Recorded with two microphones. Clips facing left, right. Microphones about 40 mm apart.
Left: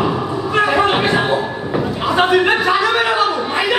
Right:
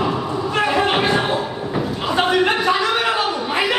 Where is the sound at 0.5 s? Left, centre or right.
Centre.